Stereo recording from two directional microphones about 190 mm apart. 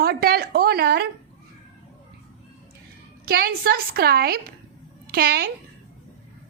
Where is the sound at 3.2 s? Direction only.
55° right (ahead or behind).